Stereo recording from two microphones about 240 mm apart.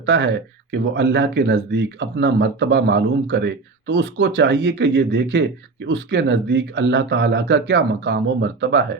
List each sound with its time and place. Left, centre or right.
0.0 s speech: right